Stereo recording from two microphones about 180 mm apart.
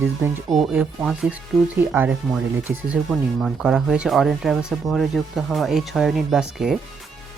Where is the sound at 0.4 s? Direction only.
Centre (ahead or behind).